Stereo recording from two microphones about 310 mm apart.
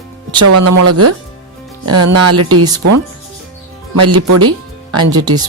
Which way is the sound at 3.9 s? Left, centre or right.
Right.